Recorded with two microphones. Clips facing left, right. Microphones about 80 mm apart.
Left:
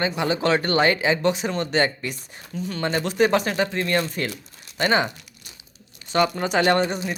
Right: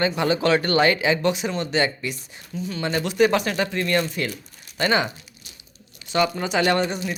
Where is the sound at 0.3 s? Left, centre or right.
Left.